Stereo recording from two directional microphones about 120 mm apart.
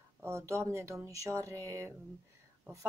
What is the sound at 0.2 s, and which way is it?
Speech, 25° right (ahead or behind).